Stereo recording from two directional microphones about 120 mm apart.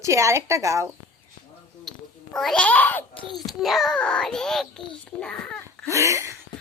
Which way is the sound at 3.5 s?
Centre (ahead or behind).